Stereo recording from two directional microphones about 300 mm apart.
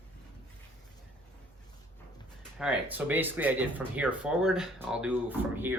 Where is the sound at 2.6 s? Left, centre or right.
Centre.